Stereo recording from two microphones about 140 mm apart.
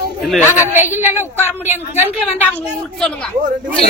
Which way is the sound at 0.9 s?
15° right (ahead or behind).